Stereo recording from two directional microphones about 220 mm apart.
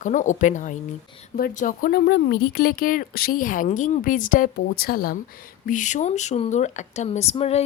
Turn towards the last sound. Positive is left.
turn(degrees=30)  # may be behind; listen again after turning